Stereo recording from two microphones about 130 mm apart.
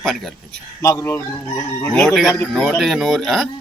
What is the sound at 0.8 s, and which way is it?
Chicken, 25° left (ahead or behind).